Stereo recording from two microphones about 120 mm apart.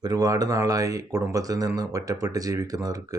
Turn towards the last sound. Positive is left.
turn(degrees=-30)  # may be behind; listen again after turning